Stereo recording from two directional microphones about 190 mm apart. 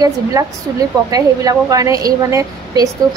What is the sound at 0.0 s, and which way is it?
A woman's voice, 15° right (ahead or behind).